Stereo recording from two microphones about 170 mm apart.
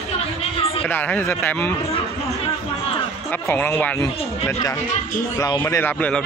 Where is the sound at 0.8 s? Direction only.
10° left (ahead or behind).